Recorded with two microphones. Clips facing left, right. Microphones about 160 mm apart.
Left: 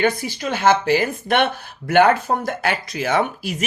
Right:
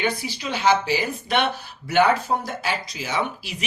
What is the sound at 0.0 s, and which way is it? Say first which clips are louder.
Speech: left 5 dB; 50° left (ahead or behind).